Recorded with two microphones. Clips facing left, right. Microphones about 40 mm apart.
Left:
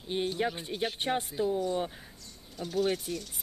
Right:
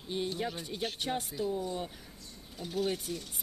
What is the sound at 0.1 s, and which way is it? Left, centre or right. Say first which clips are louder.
Speech: left 4 dB; left.